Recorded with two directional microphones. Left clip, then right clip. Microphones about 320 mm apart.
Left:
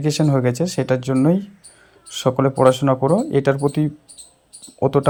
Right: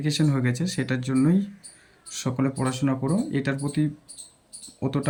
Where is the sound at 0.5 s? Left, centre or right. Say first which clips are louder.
Left 9 dB; centre.